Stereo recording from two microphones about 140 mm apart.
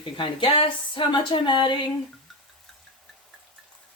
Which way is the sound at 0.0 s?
35° left (ahead or behind).